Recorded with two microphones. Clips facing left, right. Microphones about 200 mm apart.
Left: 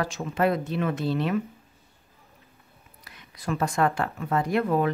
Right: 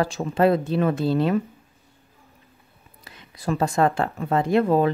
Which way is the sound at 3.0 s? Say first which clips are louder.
Right 5 dB; 30° right (ahead or behind).